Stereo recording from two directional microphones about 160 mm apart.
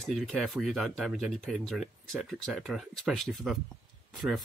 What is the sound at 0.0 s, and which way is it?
Speech, centre (ahead or behind).